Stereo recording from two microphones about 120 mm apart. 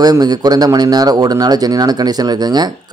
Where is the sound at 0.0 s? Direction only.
35° right (ahead or behind).